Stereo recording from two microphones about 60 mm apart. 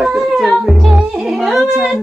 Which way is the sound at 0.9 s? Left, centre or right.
Centre.